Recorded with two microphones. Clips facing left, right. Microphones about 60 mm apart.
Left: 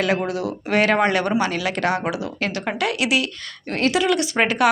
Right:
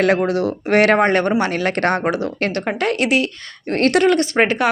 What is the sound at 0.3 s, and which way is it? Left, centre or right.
Speech, right.